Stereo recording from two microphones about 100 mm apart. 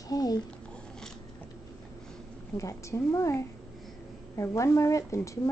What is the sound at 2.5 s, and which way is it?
A woman's voice, 30° left (ahead or behind).